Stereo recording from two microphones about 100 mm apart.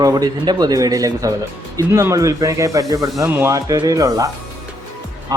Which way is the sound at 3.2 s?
25° right (ahead or behind).